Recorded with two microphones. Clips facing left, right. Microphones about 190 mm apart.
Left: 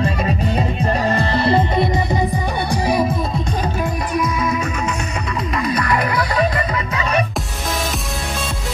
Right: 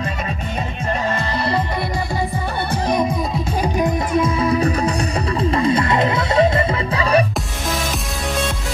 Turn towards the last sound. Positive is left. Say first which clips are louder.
# right 3 dB
turn(degrees=-30)  # may be behind; listen again after turning